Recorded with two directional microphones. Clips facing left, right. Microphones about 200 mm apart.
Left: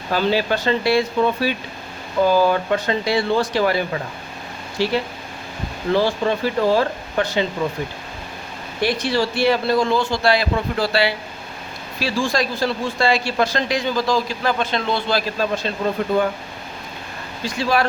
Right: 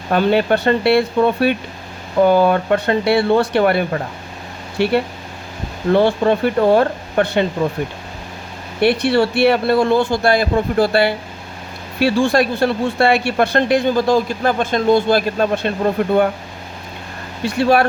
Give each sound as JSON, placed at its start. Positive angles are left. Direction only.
{"t": 0.1, "sound": "speech", "side_deg": -60}
{"t": 8.8, "sound": "speech", "side_deg": -65}
{"t": 11.9, "sound": "speech", "side_deg": -65}
{"t": 17.4, "sound": "speech", "side_deg": -60}